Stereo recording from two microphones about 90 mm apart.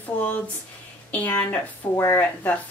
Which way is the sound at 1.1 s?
20° left (ahead or behind).